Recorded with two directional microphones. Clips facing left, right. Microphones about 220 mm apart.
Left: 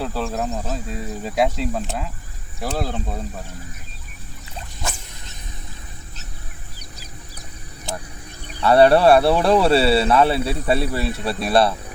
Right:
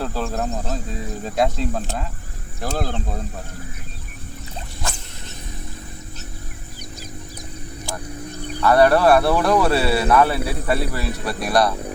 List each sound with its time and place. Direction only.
0.0 s speech: centre (ahead or behind)
8.6 s speech: 30° left (ahead or behind)